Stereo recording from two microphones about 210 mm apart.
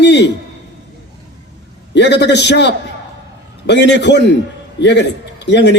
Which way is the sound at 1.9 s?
55° left (ahead or behind).